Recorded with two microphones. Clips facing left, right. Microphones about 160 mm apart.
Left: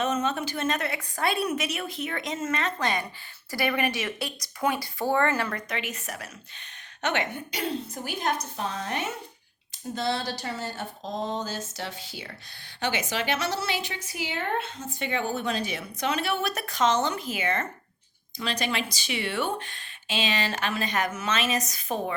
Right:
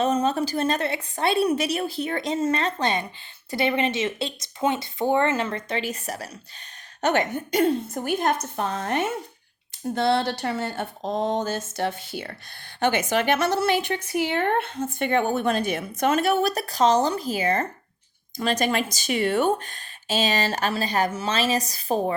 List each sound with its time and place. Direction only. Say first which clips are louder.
0.0 s a woman's voice: right 5 dB; 35° right (ahead or behind)
18.3 s speech: right 6 dB; 45° right (ahead or behind)